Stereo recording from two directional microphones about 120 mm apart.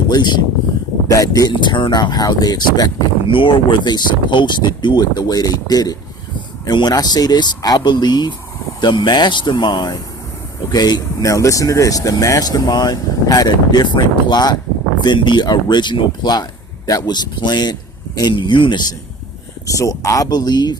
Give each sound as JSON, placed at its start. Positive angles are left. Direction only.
{"t": 0.1, "sound": "speech", "side_deg": 35}
{"t": 3.2, "sound": "speech", "side_deg": 45}
{"t": 19.6, "sound": "speech", "side_deg": 30}